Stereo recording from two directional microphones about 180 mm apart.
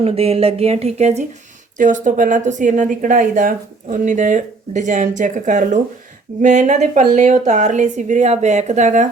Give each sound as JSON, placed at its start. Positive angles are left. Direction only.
{"t": 0.0, "sound": "speech", "side_deg": -35}